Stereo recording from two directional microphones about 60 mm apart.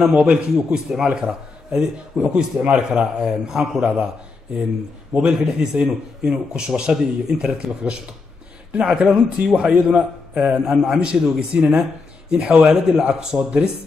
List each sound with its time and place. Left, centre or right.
0.2 s a man's voice: centre
5.3 s a man's voice: centre